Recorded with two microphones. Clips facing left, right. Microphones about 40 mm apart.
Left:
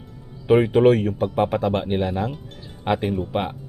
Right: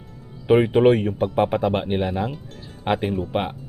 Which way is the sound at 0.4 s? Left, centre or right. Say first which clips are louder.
Even; centre.